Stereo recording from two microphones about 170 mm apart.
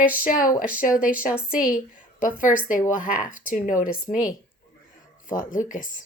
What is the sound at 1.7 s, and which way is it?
A woman's voice, 50° left (ahead or behind).